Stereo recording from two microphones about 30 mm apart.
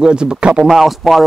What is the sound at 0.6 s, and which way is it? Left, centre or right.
Speech, centre.